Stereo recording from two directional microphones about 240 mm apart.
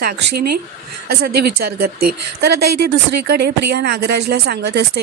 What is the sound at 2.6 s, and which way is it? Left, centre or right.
Speech, right.